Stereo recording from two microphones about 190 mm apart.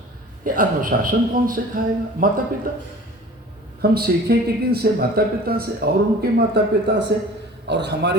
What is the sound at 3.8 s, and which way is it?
Speech, 55° right (ahead or behind).